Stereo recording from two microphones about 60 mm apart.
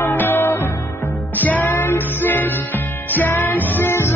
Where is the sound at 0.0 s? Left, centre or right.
Left.